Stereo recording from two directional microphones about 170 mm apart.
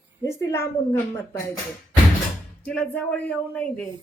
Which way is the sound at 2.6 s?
5° left (ahead or behind).